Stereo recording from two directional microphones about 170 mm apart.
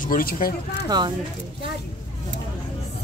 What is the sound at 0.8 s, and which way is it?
Speech, 25° right (ahead or behind).